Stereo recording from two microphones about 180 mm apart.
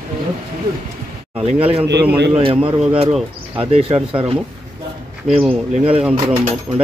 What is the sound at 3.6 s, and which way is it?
Speech, 35° right (ahead or behind).